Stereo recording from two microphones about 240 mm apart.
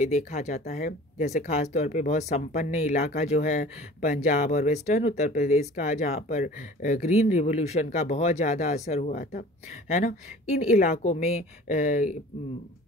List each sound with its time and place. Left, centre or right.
0.0 s speech: left